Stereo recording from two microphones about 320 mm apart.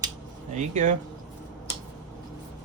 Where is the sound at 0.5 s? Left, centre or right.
Right.